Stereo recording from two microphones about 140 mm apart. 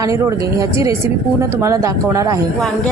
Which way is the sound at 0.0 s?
20° right (ahead or behind).